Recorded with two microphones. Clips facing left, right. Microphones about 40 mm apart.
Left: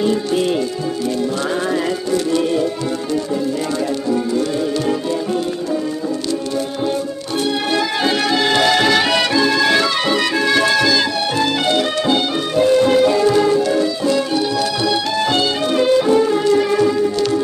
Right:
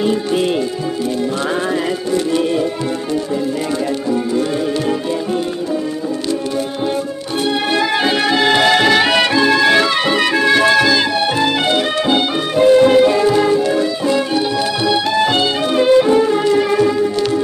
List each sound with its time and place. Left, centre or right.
0.0 s music: centre
2.1 s music: centre
7.7 s music: centre